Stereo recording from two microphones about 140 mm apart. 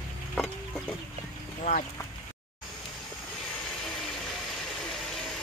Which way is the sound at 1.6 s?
65° left (ahead or behind).